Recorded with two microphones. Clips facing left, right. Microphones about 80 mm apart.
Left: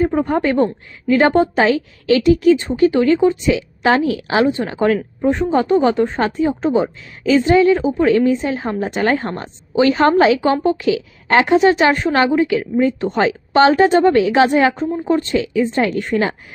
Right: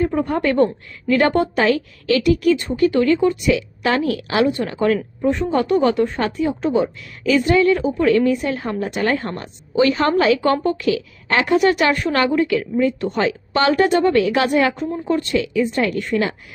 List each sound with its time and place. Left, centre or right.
0.0 s a woman's voice: left